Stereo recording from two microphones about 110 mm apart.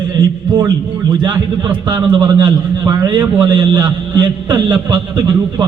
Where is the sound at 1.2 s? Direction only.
45° right (ahead or behind).